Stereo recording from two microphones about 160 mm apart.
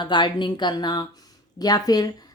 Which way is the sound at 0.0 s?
30° left (ahead or behind).